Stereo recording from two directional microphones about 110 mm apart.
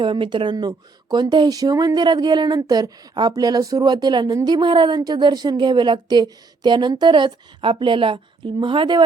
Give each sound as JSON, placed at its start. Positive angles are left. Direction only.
{"t": 0.0, "sound": "a woman's voice", "side_deg": -45}